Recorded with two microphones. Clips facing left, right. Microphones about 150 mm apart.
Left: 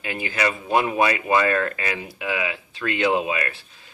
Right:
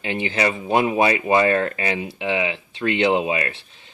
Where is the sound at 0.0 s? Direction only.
25° right (ahead or behind).